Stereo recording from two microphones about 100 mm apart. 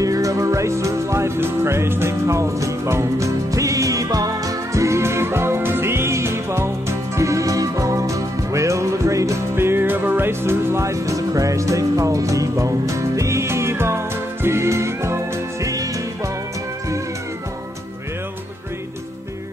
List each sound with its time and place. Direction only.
0.0 s music: 35° right (ahead or behind)